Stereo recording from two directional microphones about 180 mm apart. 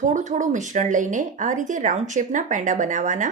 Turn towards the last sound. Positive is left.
turn(degrees=-45)  # may be behind; listen again after turning